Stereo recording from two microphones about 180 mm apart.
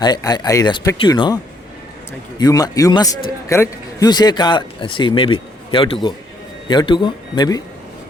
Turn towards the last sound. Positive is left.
turn(degrees=25)  # may be behind; listen again after turning